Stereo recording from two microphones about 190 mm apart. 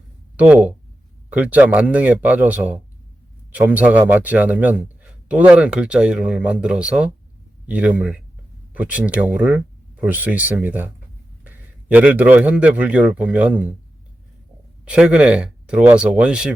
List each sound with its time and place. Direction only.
0.3 s a man's voice: 10° right (ahead or behind)
14.8 s speech: 5° right (ahead or behind)